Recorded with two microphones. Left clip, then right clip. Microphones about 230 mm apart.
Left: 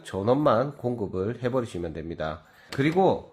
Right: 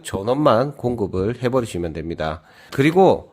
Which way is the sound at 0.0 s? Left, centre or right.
Right.